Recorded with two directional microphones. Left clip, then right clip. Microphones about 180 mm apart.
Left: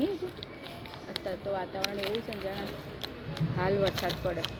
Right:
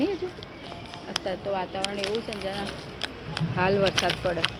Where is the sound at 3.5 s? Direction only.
5° right (ahead or behind).